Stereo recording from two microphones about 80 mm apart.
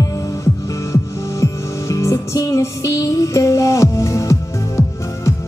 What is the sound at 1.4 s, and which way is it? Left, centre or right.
Music, left.